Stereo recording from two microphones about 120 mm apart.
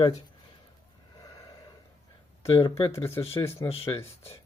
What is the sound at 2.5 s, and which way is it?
Speech, 45° left (ahead or behind).